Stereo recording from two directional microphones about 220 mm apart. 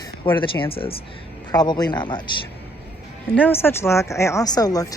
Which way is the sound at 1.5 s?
20° left (ahead or behind).